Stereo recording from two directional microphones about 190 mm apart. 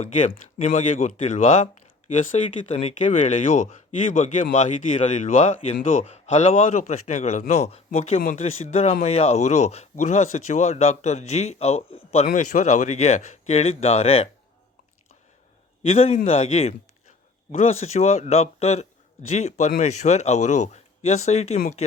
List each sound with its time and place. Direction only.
0.7 s speech: 40° left (ahead or behind)
15.8 s speech: 35° left (ahead or behind)